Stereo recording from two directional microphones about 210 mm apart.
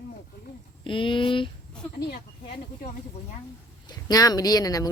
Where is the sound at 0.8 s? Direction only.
25° left (ahead or behind).